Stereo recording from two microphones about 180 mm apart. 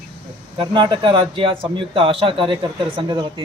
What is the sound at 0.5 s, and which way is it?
A man's voice, 25° right (ahead or behind).